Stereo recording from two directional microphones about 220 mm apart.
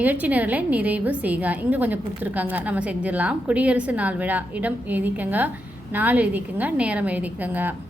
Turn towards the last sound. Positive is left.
turn(degrees=-10)  # may be behind; listen again after turning